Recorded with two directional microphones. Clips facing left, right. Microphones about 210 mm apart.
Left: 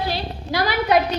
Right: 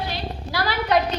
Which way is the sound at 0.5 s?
15° left (ahead or behind).